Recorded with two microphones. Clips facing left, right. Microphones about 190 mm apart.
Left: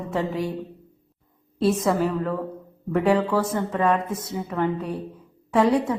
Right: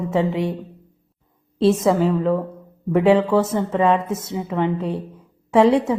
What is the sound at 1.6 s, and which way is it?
A woman's voice, 25° right (ahead or behind).